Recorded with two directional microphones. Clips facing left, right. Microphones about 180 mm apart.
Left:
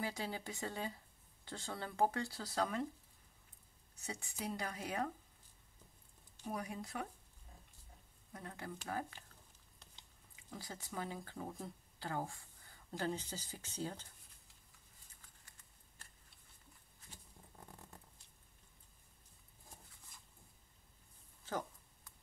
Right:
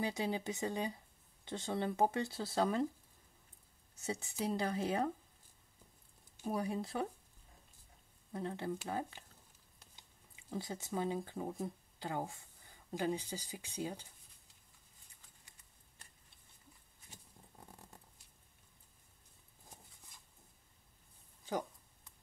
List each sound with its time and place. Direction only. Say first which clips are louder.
0.0 s speech: right 5 dB; 20° right (ahead or behind)
4.0 s speech: right 6 dB; 25° right (ahead or behind)
6.4 s speech: right 6 dB; 30° right (ahead or behind)
8.3 s speech: right 9 dB; 30° right (ahead or behind)
10.3 s speech: right 8 dB; 20° right (ahead or behind)